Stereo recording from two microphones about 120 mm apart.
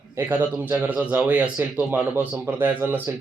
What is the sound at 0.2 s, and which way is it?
A man's voice, 15° right (ahead or behind).